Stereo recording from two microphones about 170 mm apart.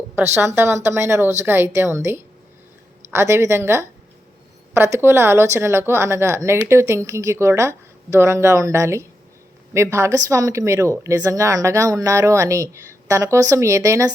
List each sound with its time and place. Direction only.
0.2 s a woman's voice: 15° right (ahead or behind)